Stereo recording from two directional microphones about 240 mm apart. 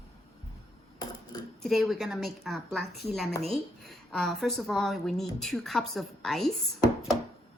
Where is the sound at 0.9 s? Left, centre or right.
Centre.